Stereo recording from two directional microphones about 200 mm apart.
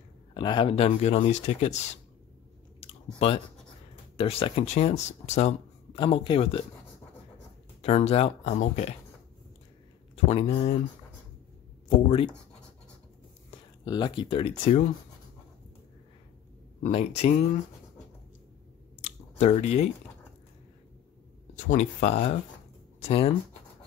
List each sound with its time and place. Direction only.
0.3 s speech: 25° left (ahead or behind)
2.8 s chewing: 30° left (ahead or behind)
4.2 s speech: 30° left (ahead or behind)
7.8 s speech: 30° left (ahead or behind)
10.1 s speech: 30° left (ahead or behind)
12.1 s speech: 30° left (ahead or behind)
13.5 s speech: 20° left (ahead or behind)
16.8 s speech: 35° left (ahead or behind)
18.9 s a sound: 35° left (ahead or behind)
21.6 s speech: 35° left (ahead or behind)